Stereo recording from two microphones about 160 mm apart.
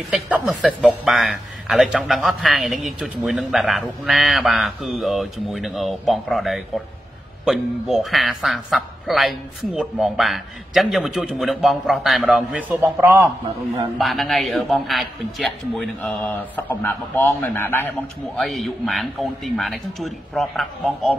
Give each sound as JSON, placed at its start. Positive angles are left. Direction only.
{"t": 0.1, "sound": "speech", "side_deg": 0}
{"t": 13.9, "sound": "speech", "side_deg": 0}
{"t": 18.4, "sound": "speech", "side_deg": 0}